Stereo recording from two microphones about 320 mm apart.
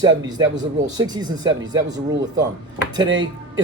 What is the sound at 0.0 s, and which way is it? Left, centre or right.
Speech, centre.